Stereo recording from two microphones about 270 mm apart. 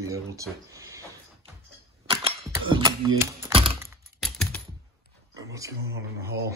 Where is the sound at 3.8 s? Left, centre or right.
Centre.